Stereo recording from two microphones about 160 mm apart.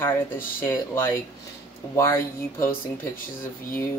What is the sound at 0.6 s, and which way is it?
Speech, 15° left (ahead or behind).